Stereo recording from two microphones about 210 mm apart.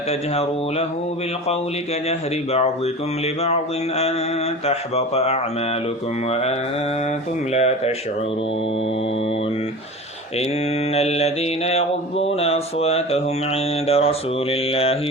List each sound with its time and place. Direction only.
0.1 s mantra: 30° left (ahead or behind)
2.0 s mantra: 30° left (ahead or behind)
10.9 s mantra: 30° left (ahead or behind)